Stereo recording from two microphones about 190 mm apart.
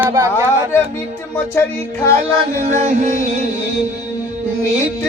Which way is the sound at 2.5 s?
40° right (ahead or behind).